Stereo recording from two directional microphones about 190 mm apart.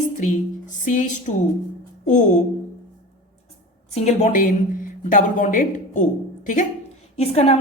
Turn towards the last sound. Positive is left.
turn(degrees=35)  # may be behind; listen again after turning